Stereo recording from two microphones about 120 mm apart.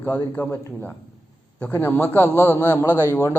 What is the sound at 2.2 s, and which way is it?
Speech, 20° right (ahead or behind).